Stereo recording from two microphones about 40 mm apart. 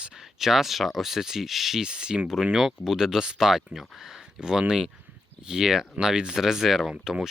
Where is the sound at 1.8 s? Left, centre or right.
Right.